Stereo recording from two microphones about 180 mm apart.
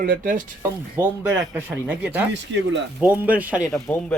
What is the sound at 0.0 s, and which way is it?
Speech, 50° right (ahead or behind).